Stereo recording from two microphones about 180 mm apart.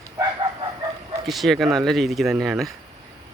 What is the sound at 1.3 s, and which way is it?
Speech, centre (ahead or behind).